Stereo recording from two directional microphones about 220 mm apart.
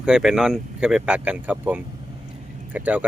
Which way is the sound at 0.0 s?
5° right (ahead or behind).